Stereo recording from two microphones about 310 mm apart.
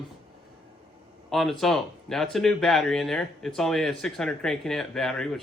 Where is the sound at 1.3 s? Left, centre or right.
Centre.